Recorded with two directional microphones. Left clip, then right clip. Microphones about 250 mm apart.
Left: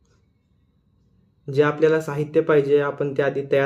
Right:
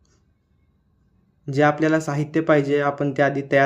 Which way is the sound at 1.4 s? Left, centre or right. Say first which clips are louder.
Left 1 dB; right.